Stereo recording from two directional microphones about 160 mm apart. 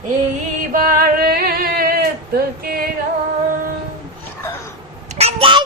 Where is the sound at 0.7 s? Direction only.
65° right (ahead or behind).